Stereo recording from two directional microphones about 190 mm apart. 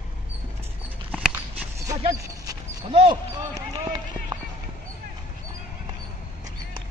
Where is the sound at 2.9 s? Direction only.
25° right (ahead or behind).